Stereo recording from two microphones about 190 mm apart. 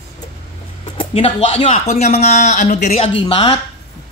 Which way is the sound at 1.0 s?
30° left (ahead or behind).